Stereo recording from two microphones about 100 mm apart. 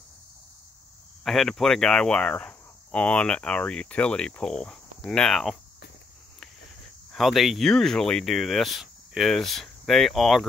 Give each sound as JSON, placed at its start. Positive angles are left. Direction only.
{"t": 1.2, "sound": "speech", "side_deg": 5}
{"t": 7.1, "sound": "speech", "side_deg": 0}